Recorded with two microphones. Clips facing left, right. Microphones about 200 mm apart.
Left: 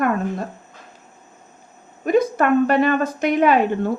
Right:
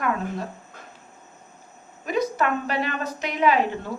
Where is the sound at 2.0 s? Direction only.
50° left (ahead or behind).